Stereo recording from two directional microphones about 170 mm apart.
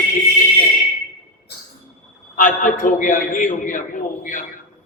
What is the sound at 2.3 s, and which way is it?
A man's voice, 50° left (ahead or behind).